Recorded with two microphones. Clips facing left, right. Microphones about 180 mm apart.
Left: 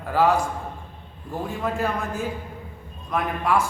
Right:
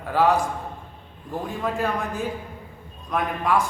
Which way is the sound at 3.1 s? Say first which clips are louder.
Even; centre (ahead or behind).